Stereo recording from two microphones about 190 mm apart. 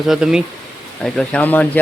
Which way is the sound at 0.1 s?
5° right (ahead or behind).